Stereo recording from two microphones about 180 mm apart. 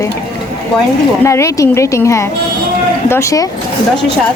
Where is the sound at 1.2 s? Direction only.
15° left (ahead or behind).